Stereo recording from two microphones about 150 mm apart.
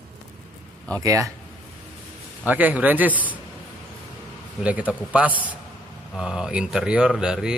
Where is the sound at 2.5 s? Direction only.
10° right (ahead or behind).